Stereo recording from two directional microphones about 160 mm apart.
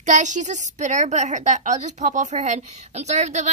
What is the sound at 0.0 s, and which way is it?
A woman's voice, 50° right (ahead or behind).